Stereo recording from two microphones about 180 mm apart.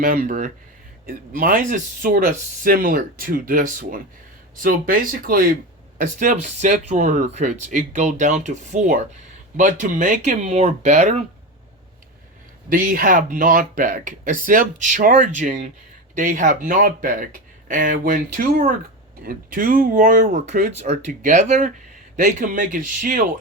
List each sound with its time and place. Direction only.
0.0 s speech: 50° right (ahead or behind)
12.6 s speech: 50° right (ahead or behind)